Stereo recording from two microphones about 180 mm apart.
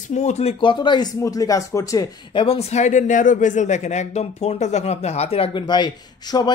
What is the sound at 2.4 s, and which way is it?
Speech, 35° left (ahead or behind).